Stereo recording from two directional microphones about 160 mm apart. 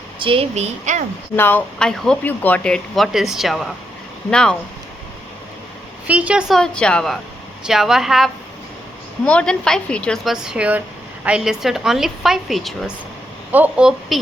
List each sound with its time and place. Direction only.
0.2 s a woman's voice: 35° right (ahead or behind)
1.4 s speech: 10° left (ahead or behind)
6.1 s a woman's voice: 10° right (ahead or behind)
6.6 s speech: 5° left (ahead or behind)